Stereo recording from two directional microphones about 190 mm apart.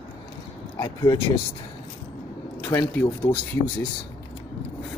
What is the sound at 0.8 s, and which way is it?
Speech, 20° left (ahead or behind).